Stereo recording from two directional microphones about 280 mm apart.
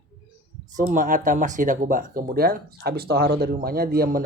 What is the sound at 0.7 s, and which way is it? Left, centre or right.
Speech, right.